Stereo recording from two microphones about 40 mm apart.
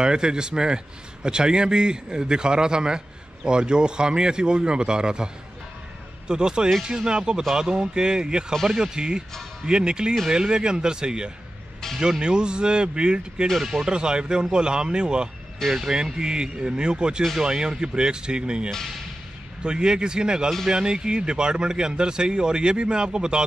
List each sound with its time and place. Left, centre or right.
0.0 s speech: right